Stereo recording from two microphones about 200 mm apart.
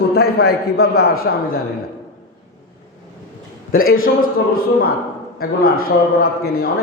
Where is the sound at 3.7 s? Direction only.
45° left (ahead or behind).